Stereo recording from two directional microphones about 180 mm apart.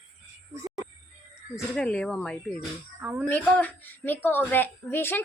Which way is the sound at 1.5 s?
5° left (ahead or behind).